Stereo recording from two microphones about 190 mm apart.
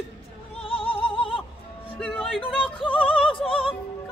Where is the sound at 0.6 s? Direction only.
30° left (ahead or behind).